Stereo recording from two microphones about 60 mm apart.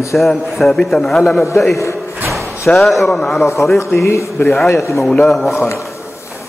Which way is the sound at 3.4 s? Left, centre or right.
Left.